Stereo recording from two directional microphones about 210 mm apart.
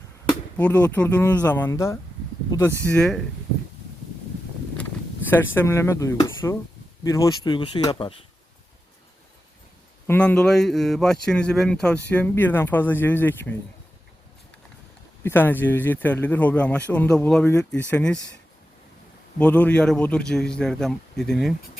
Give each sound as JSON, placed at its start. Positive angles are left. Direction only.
{"t": 0.5, "sound": "a man's voice", "side_deg": 5}
{"t": 5.5, "sound": "speech", "side_deg": 10}
{"t": 10.1, "sound": "a man's voice", "side_deg": 5}
{"t": 15.2, "sound": "speech", "side_deg": 10}
{"t": 19.4, "sound": "a man's voice", "side_deg": 5}